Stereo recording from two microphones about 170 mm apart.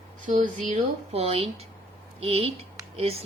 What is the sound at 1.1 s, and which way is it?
Speech, 35° right (ahead or behind).